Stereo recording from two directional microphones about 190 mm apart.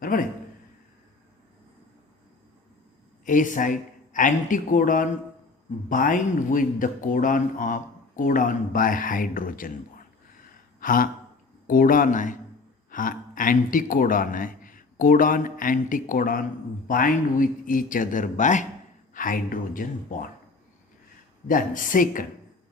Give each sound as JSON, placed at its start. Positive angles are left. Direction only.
{"t": 0.0, "sound": "a man's voice", "side_deg": 45}
{"t": 3.2, "sound": "speech", "side_deg": 45}
{"t": 10.8, "sound": "gasp", "side_deg": 45}
{"t": 11.7, "sound": "speech", "side_deg": 45}
{"t": 21.4, "sound": "speech", "side_deg": 45}